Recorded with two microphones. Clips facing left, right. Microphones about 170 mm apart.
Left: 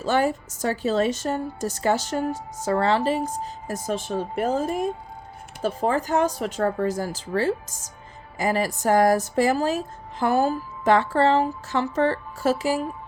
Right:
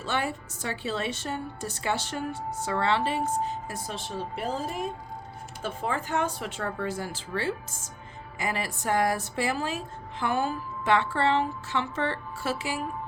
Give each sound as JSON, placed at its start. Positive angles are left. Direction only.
{"t": 0.0, "sound": "a woman's voice", "side_deg": 40}